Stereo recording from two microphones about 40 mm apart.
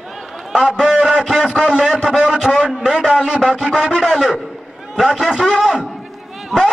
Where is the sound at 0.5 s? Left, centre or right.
Centre.